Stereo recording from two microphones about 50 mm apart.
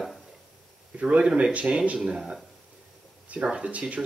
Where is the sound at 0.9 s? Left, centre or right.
Right.